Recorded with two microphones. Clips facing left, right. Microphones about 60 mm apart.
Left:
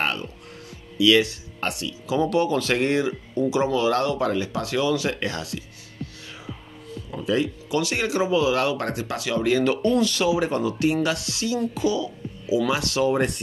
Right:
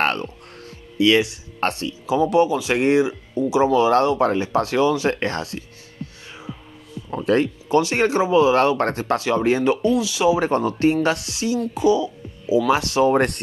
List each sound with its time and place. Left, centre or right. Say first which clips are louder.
0.0 s music: right 5 dB; right
1.6 s speech: right 5 dB; right
2.0 s speech: right 4 dB; right
7.1 s speech: right 5 dB; right
9.8 s speech: right 1 dB; centre
10.2 s speech: right 4 dB; right
11.7 s music: right 6 dB; right
12.6 s speech: right 6 dB; right
13.1 s speech: right 4 dB; right